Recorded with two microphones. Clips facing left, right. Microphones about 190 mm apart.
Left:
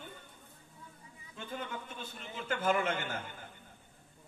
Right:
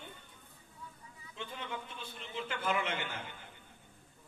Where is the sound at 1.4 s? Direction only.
45° left (ahead or behind).